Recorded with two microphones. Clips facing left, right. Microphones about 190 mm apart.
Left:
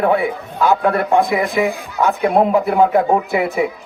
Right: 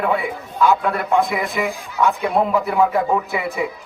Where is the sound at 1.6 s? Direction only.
55° left (ahead or behind).